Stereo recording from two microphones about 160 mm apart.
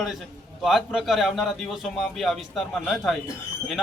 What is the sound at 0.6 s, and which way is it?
A man's voice, centre (ahead or behind).